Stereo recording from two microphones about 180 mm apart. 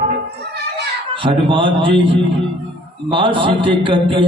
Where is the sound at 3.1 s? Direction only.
30° right (ahead or behind).